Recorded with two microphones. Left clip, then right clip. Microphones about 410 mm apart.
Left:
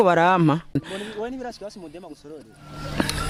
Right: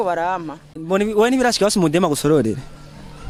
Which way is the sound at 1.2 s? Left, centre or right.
Right.